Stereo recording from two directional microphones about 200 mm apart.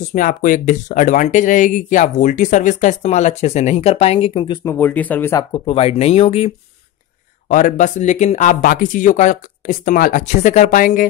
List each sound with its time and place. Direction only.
0.1 s speech: 45° left (ahead or behind); by 4.7 s 25° left (ahead or behind)
4.7 s speech: 10° left (ahead or behind)
5.5 s speech: 30° left (ahead or behind)
7.4 s speech: 40° left (ahead or behind)